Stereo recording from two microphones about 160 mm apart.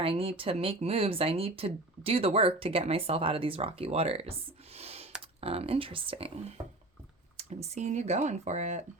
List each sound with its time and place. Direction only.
0.0 s speech: 35° right (ahead or behind)